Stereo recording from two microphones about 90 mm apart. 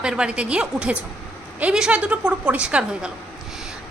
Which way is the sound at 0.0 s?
10° right (ahead or behind).